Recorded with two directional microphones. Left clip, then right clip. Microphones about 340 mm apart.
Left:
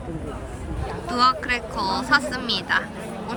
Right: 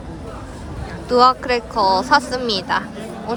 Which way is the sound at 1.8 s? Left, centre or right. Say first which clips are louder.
Right 7 dB; centre.